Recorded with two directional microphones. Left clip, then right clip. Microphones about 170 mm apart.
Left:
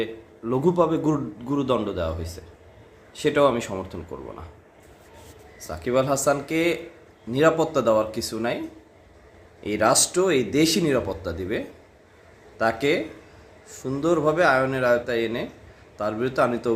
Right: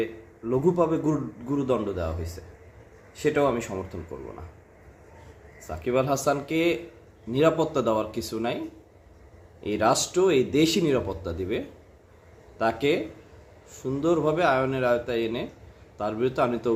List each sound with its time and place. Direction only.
0.0 s a man's voice: 15° left (ahead or behind)
3.2 s speech: 10° left (ahead or behind)
5.6 s speech: 5° left (ahead or behind)
9.6 s speech: centre (ahead or behind)